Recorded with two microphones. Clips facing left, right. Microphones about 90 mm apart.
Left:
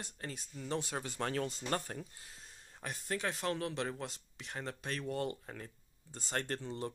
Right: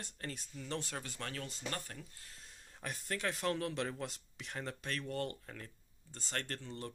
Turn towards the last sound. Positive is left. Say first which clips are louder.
# left 5 dB
turn(degrees=20)  # may be behind; listen again after turning